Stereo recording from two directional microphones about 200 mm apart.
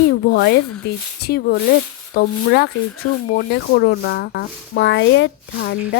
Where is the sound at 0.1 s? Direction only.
55° left (ahead or behind).